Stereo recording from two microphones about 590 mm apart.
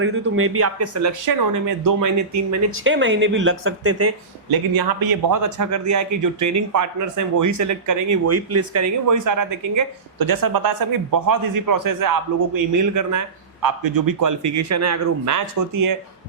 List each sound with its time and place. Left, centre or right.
0.0 s speech: centre
4.7 s speech: right